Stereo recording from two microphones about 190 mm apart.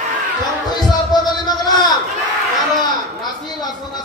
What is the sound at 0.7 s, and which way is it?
Music, 20° left (ahead or behind).